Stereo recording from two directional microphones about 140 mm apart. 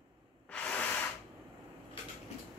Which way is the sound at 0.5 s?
10° left (ahead or behind).